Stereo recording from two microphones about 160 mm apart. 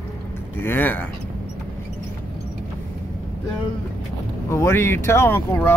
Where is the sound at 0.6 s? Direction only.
10° left (ahead or behind).